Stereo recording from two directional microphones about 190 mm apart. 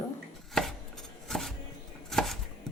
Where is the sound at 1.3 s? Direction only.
Centre (ahead or behind).